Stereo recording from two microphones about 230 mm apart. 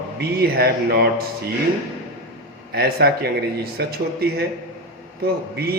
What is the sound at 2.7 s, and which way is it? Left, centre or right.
Speech, right.